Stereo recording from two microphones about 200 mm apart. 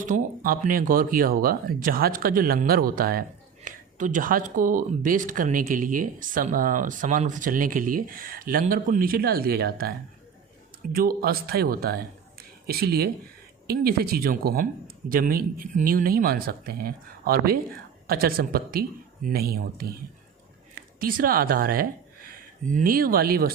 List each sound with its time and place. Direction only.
0.0 s speech: 45° right (ahead or behind)
10.9 s speech: 50° right (ahead or behind)
12.4 s a sound: 50° right (ahead or behind)
13.7 s speech: 50° right (ahead or behind)
21.0 s speech: 45° right (ahead or behind)